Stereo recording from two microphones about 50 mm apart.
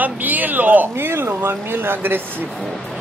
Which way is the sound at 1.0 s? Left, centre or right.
Right.